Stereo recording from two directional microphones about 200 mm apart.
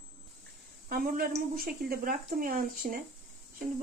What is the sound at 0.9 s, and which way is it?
Speech, 45° right (ahead or behind).